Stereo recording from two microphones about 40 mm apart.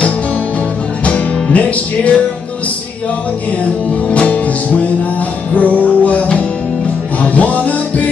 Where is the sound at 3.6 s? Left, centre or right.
Left.